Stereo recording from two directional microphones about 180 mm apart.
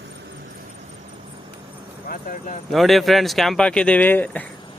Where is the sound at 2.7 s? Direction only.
Centre (ahead or behind).